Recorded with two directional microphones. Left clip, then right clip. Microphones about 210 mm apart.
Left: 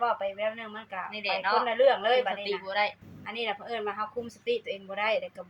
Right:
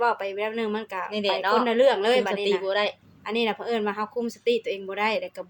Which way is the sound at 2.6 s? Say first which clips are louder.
Left 1 dB; 30° right (ahead or behind).